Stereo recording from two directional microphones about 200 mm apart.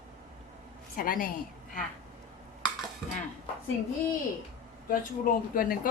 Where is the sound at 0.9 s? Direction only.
45° left (ahead or behind).